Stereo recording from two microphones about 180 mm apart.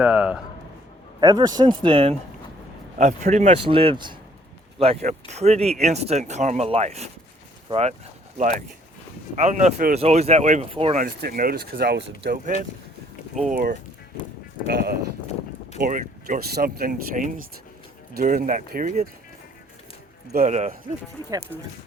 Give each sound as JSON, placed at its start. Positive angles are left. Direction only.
{"t": 0.0, "sound": "a man's voice", "side_deg": -5}
{"t": 1.2, "sound": "speech", "side_deg": -25}
{"t": 3.0, "sound": "speech", "side_deg": -45}
{"t": 4.8, "sound": "speech", "side_deg": -35}
{"t": 10.9, "sound": "speech", "side_deg": -55}
{"t": 13.5, "sound": "speech", "side_deg": -50}
{"t": 14.7, "sound": "speech", "side_deg": -60}
{"t": 15.8, "sound": "speech", "side_deg": -50}
{"t": 20.3, "sound": "speech", "side_deg": -40}